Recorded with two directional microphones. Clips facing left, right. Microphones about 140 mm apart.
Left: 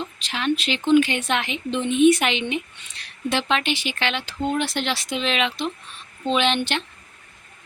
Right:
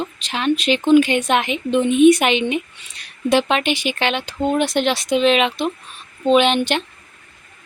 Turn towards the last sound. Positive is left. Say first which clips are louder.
# right 7 dB
turn(degrees=-15)  # may be behind; listen again after turning